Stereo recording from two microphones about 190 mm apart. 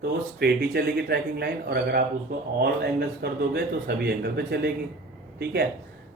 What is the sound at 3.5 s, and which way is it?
Speech, 60° right (ahead or behind).